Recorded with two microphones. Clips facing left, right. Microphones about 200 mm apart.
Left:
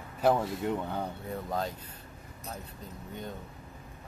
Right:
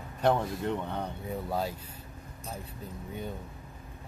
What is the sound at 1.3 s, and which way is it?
Speech, 5° right (ahead or behind).